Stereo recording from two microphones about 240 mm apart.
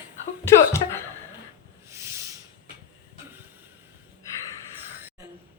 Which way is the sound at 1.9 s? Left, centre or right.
Centre.